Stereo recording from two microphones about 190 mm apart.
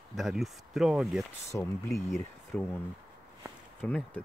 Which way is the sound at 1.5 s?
15° left (ahead or behind).